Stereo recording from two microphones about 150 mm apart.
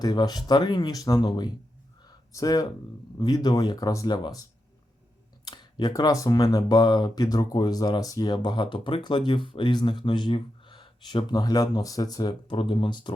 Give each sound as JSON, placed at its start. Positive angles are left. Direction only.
{"t": 0.0, "sound": "speech", "side_deg": 25}
{"t": 2.0, "sound": "a sound", "side_deg": 25}
{"t": 3.2, "sound": "speech", "side_deg": 25}
{"t": 5.5, "sound": "speech", "side_deg": 25}